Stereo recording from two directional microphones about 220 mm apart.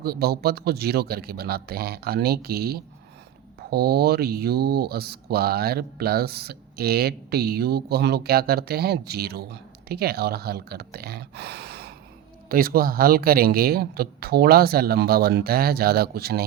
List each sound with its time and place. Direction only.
0.0 s speech: 45° right (ahead or behind)